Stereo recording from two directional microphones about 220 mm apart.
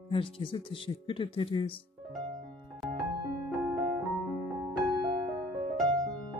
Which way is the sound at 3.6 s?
Centre (ahead or behind).